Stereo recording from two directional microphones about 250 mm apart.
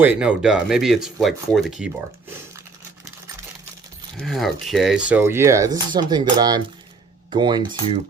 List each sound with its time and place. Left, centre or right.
0.0 s speech: centre
4.2 s speech: centre